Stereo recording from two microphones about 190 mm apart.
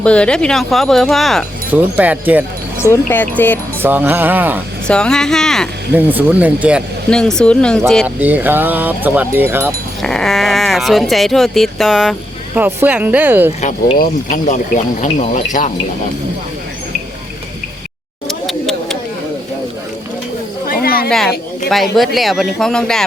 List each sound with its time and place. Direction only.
0.0 s speech: 5° left (ahead or behind)
3.0 s speech: 10° left (ahead or behind)
3.8 s speech: 10° right (ahead or behind)
4.9 s speech: 5° left (ahead or behind)
5.9 s speech: 10° right (ahead or behind)
7.1 s speech: 5° left (ahead or behind)
8.0 s speech: 10° right (ahead or behind)
10.0 s speech: centre (ahead or behind)
13.6 s speech: 40° left (ahead or behind)
15.0 s speech: 30° left (ahead or behind)
18.4 s tick-tock: centre (ahead or behind)
20.7 s cricket: 50° left (ahead or behind)
21.1 s a woman's voice: centre (ahead or behind)